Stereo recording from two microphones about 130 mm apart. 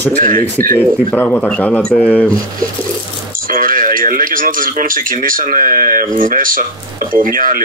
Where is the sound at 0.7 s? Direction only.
15° left (ahead or behind).